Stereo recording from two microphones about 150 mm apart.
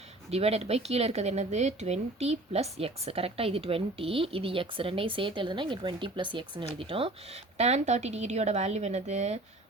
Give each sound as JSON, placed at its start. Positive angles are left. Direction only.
{"t": 0.3, "sound": "speech", "side_deg": -45}
{"t": 7.6, "sound": "a woman's voice", "side_deg": -50}